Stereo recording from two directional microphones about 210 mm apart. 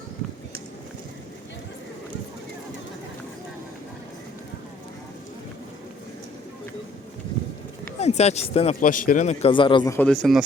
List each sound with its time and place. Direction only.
7.9 s speech: 30° left (ahead or behind); by 10.1 s 15° left (ahead or behind)
10.1 s speech: centre (ahead or behind)